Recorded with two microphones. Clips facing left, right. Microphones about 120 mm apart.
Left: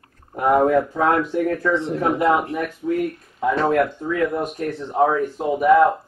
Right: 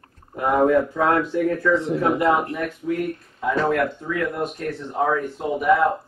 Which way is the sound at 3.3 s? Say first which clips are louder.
Left 3 dB; 35° left (ahead or behind).